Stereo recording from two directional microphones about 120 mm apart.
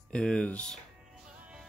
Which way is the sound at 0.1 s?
10° left (ahead or behind).